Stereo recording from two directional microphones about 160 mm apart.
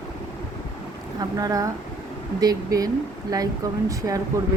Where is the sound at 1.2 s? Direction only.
25° right (ahead or behind).